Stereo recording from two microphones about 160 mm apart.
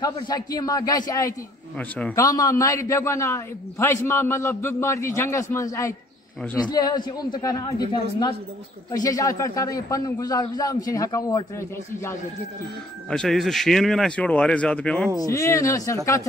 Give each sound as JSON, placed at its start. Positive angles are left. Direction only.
{"t": 0.0, "sound": "a man's voice", "side_deg": 25}
{"t": 1.8, "sound": "a man's voice", "side_deg": 10}
{"t": 2.1, "sound": "a man's voice", "side_deg": 20}
{"t": 13.1, "sound": "speech", "side_deg": 5}
{"t": 15.1, "sound": "a man's voice", "side_deg": 20}